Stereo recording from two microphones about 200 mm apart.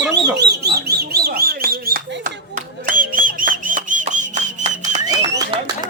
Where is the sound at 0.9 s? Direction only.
55° right (ahead or behind).